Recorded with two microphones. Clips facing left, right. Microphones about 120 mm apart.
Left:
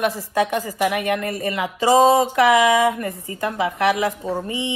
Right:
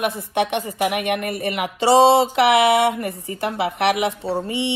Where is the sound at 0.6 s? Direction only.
25° right (ahead or behind).